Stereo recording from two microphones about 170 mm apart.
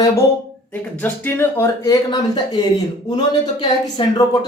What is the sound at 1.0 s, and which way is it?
Speech, 10° left (ahead or behind).